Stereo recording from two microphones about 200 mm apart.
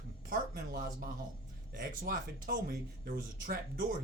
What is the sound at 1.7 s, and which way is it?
Speech, 45° right (ahead or behind).